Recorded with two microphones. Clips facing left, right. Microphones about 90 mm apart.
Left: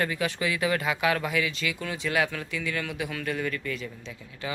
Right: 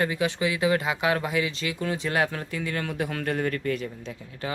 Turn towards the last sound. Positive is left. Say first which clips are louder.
# right 3 dB
turn(degrees=-45)  # may be behind; listen again after turning